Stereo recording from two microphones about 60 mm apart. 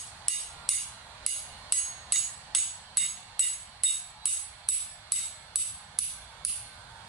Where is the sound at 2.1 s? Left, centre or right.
Centre.